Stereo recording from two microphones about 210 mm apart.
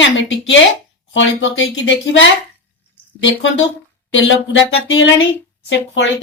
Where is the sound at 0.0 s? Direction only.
60° left (ahead or behind).